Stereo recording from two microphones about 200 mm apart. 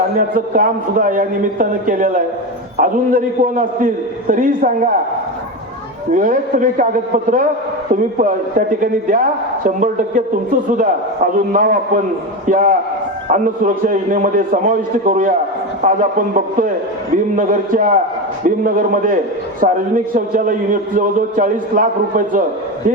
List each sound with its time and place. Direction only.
0.2 s a man's voice: 45° right (ahead or behind)
6.1 s a man's voice: 40° right (ahead or behind)